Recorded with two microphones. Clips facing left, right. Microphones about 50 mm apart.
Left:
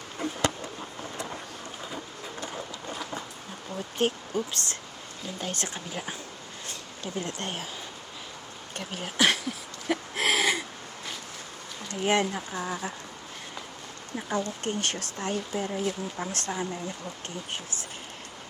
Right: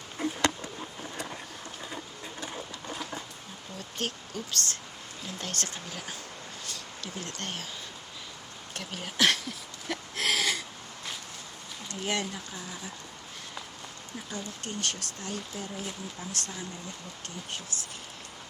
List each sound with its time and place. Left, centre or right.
3.8 s speech: left
8.7 s a sound: centre
11.9 s speech: left
14.2 s speech: left